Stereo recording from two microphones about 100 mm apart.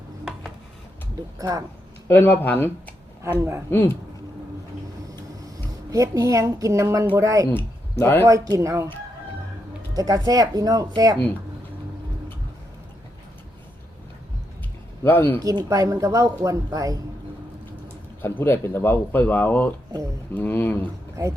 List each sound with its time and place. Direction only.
1.4 s speech: 35° right (ahead or behind)
2.0 s speech: 20° left (ahead or behind)
3.7 s speech: 25° left (ahead or behind)
5.5 s speech: 30° right (ahead or behind)
7.5 s speech: 20° left (ahead or behind)
8.5 s speech: 30° right (ahead or behind)
9.9 s speech: 40° right (ahead or behind)
15.0 s speech: 20° left (ahead or behind)
15.4 s speech: 35° right (ahead or behind)
18.2 s speech: 20° left (ahead or behind)
21.2 s speech: 35° right (ahead or behind)